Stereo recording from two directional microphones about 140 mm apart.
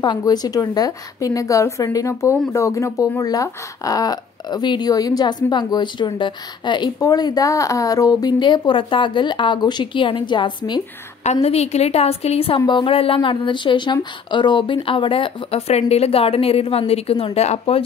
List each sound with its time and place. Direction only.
0.0 s a woman's voice: 30° left (ahead or behind)
11.4 s a woman's voice: 50° left (ahead or behind)